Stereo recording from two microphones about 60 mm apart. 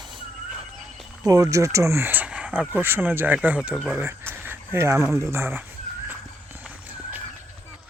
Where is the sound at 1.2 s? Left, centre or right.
Right.